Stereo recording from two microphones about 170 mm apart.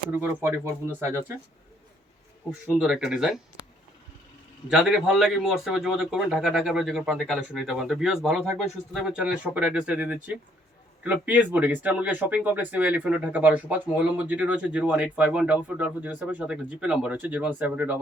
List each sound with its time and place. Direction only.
0.1 s speech: 10° right (ahead or behind)
2.7 s a man's voice: 5° right (ahead or behind)
4.7 s a man's voice: 5° right (ahead or behind)